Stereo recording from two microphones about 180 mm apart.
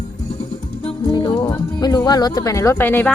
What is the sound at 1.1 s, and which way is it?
Music, 25° left (ahead or behind).